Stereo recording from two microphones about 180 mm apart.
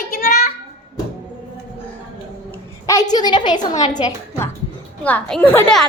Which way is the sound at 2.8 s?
20° left (ahead or behind).